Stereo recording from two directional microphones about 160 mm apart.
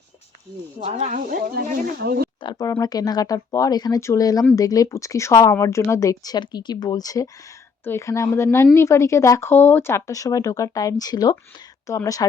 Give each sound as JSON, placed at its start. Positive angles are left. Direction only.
{"t": 0.9, "sound": "speech", "side_deg": -40}
{"t": 1.3, "sound": "speech", "side_deg": -65}
{"t": 2.4, "sound": "speech", "side_deg": 25}